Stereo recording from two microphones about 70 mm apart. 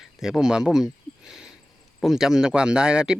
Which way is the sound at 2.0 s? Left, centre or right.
Centre.